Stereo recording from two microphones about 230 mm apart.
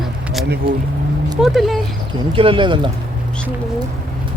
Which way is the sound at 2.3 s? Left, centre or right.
Right.